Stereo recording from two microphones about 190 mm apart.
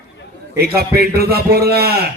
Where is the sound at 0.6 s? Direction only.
55° right (ahead or behind).